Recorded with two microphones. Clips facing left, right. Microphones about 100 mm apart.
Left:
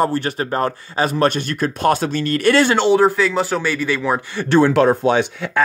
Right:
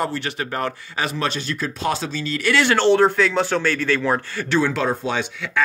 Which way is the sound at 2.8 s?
5° left (ahead or behind).